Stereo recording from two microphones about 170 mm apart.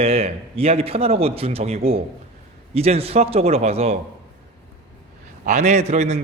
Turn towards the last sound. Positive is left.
turn(degrees=-45)  # may be behind; listen again after turning